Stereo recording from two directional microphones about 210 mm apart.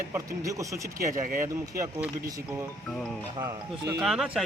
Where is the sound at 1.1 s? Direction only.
40° right (ahead or behind).